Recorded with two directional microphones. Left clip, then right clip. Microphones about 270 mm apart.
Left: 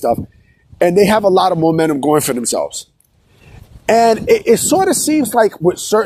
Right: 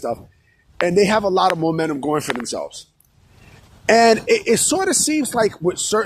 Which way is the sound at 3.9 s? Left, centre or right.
Left.